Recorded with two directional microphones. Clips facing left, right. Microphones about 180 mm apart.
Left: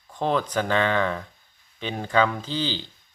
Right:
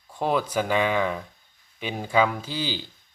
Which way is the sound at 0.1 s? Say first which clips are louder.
Even; 10° right (ahead or behind).